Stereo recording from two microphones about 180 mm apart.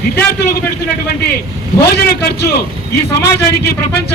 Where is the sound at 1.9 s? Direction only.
60° left (ahead or behind).